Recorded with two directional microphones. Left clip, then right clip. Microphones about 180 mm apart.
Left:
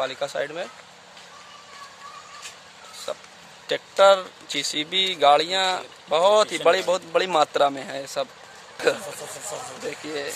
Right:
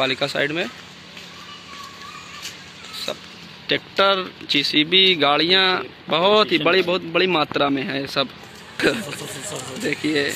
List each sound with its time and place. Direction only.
0.0 s speech: 10° left (ahead or behind)
3.6 s speech: 25° left (ahead or behind); by 10.3 s 5° left (ahead or behind)